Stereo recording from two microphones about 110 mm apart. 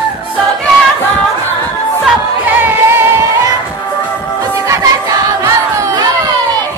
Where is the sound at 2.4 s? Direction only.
15° right (ahead or behind).